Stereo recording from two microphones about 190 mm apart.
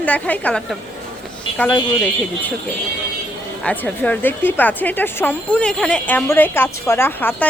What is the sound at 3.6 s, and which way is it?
A woman's voice, 10° left (ahead or behind).